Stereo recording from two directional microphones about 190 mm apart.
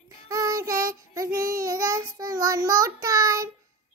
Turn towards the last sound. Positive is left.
turn(degrees=-15)  # may be behind; listen again after turning